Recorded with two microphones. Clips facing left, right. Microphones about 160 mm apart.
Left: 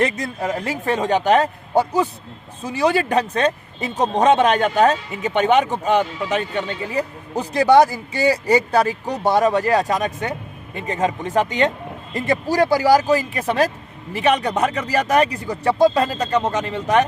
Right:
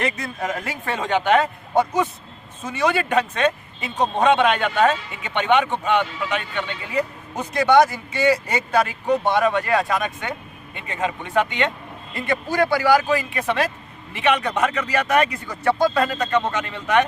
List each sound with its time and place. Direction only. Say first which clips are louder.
0.0 s speech: left 4 dB; 35° left (ahead or behind)